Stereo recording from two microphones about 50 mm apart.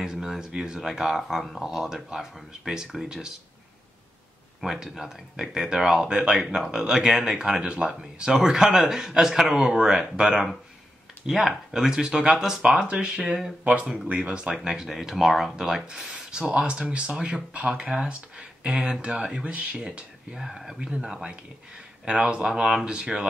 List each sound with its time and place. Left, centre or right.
0.0 s a sound: centre
0.5 s speech: centre
4.6 s speech: centre
12.6 s speech: right
13.7 s speech: right
22.5 s speech: centre